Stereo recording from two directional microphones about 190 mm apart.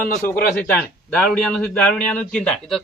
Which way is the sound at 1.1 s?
Centre (ahead or behind).